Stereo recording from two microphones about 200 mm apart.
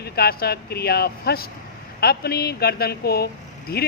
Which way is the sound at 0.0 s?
50° left (ahead or behind).